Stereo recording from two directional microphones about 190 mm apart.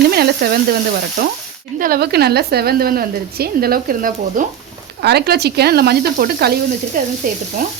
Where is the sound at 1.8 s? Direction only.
55° right (ahead or behind).